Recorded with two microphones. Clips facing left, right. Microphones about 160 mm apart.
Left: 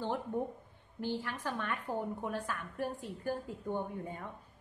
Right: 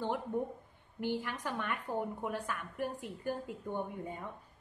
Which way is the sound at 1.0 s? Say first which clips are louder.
Right 1 dB; 15° right (ahead or behind).